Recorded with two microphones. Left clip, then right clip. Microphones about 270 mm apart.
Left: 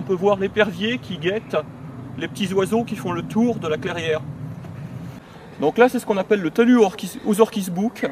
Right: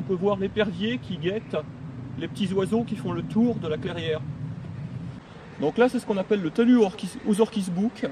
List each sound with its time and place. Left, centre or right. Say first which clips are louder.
0.1 s speech: left 6 dB; left
0.4 s speech: left 6 dB; centre
5.8 s speech: left 6 dB; centre